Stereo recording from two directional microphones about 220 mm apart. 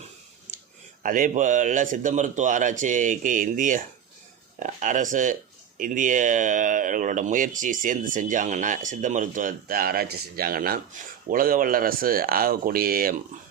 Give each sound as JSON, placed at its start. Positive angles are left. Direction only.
{"t": 1.0, "sound": "speech", "side_deg": -40}